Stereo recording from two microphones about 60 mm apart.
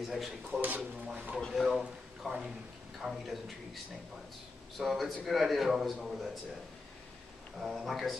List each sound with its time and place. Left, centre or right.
0.0 s a man's voice: centre
0.6 s speech: right
1.5 s a man's voice: centre
7.6 s a man's voice: centre